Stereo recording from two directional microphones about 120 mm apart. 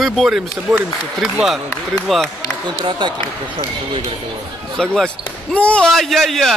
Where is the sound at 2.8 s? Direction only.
40° right (ahead or behind).